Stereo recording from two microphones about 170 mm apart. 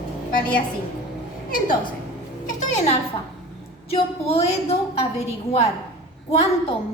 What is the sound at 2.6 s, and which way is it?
Music, 45° left (ahead or behind).